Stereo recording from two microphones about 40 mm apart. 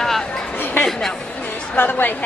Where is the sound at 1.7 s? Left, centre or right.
Left.